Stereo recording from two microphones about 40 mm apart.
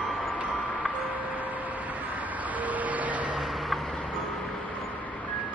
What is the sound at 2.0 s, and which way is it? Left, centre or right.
Vehicle, right.